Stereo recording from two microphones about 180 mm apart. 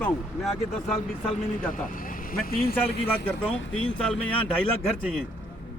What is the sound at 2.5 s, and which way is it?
Speech, 55° left (ahead or behind).